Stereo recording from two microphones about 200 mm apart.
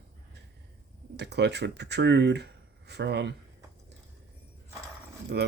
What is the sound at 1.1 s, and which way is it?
Speech, 55° right (ahead or behind).